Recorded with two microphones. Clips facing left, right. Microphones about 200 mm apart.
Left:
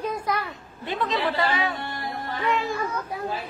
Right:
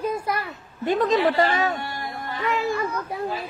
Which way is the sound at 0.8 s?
45° right (ahead or behind).